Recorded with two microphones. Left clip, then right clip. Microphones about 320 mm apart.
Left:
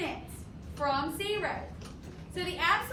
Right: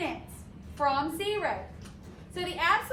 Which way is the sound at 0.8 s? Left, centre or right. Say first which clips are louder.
Right 3 dB; right.